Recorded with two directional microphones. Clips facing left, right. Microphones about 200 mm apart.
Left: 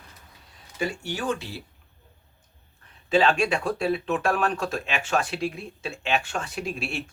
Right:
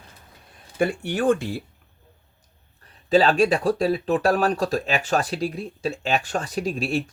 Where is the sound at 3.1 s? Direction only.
35° right (ahead or behind).